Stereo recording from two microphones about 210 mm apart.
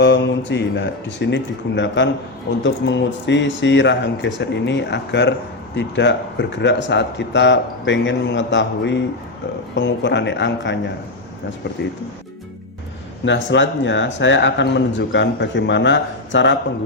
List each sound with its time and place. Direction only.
0.0 s a man's voice: 60° left (ahead or behind)
13.2 s a man's voice: 60° left (ahead or behind)